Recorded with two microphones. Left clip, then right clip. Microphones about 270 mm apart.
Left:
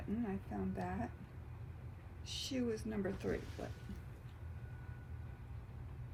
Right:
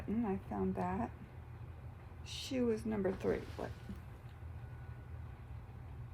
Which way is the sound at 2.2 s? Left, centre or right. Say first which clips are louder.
Right 4 dB; right.